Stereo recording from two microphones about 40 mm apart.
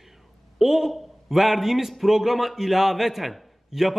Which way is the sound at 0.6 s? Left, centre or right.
Centre.